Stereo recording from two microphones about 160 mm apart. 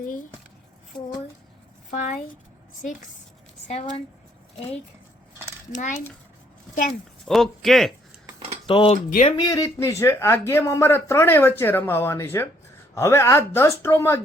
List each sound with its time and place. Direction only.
1.9 s speech: 50° left (ahead or behind)
3.7 s speech: 40° left (ahead or behind)
7.3 s speech: centre (ahead or behind)
8.6 s speech: 35° left (ahead or behind)
9.0 s speech: 55° left (ahead or behind)
9.4 s speech: 20° left (ahead or behind)